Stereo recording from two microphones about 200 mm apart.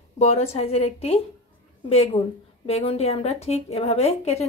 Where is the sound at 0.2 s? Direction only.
30° left (ahead or behind).